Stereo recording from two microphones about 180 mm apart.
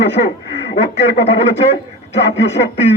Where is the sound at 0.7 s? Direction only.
35° left (ahead or behind).